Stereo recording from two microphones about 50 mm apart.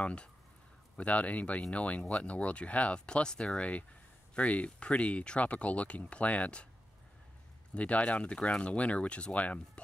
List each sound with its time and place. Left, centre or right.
0.0 s speech: left
7.7 s speech: left